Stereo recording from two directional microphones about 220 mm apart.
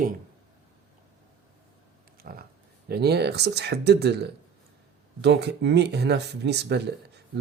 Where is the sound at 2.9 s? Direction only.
45° right (ahead or behind).